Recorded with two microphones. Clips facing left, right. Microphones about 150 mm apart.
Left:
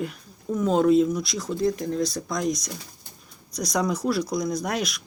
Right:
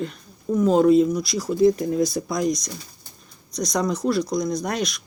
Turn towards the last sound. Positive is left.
turn(degrees=5)  # may be behind; listen again after turning